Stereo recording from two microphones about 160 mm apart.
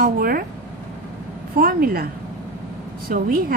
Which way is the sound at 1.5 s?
70° right (ahead or behind).